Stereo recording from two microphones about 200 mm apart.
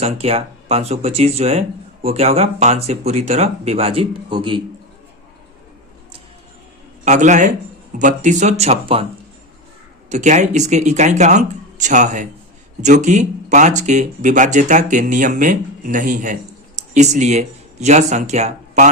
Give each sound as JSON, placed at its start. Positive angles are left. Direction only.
{"t": 0.0, "sound": "speech", "side_deg": -30}
{"t": 7.0, "sound": "speech", "side_deg": -35}
{"t": 10.1, "sound": "speech", "side_deg": -35}